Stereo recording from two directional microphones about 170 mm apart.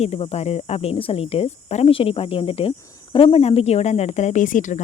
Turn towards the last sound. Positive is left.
turn(degrees=50)  # may be behind; listen again after turning